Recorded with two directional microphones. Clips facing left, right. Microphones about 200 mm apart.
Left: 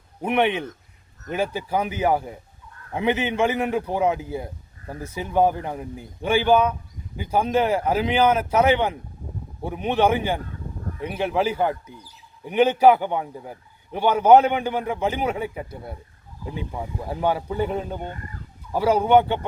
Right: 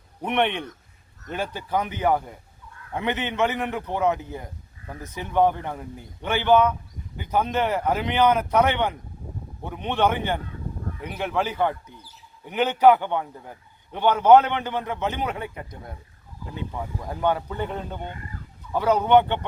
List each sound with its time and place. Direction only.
0.3 s a man's voice: 5° left (ahead or behind)
11.0 s speech: 30° left (ahead or behind)
11.3 s a man's voice: 10° left (ahead or behind)